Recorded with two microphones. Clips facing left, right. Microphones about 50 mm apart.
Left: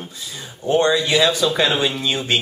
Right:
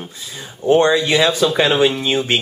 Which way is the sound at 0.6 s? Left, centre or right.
Right.